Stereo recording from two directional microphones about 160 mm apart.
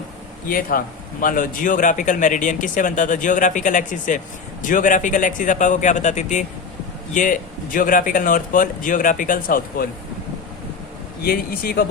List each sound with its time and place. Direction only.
0.4 s a man's voice: 65° left (ahead or behind)
11.2 s a man's voice: 70° left (ahead or behind)